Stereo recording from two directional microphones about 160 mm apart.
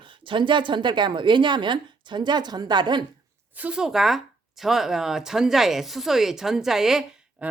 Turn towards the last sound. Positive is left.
turn(degrees=-10)  # may be behind; listen again after turning